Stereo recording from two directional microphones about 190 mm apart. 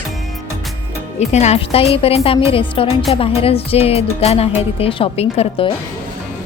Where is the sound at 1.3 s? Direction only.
35° left (ahead or behind).